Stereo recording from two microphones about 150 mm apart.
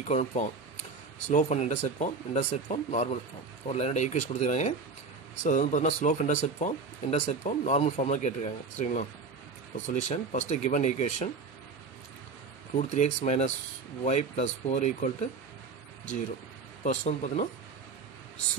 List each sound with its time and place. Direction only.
0.0 s speech: 50° left (ahead or behind)
12.7 s speech: 55° left (ahead or behind)
16.8 s speech: 50° left (ahead or behind)